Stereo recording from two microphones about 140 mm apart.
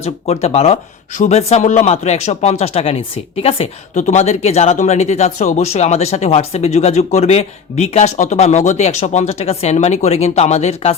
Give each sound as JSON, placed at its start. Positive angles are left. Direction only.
{"t": 0.0, "sound": "speech", "side_deg": 50}